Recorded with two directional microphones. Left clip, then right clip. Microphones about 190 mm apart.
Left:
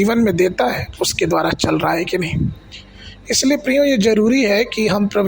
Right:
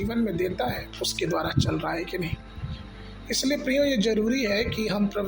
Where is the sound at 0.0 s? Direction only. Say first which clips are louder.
Left 12 dB; 50° left (ahead or behind).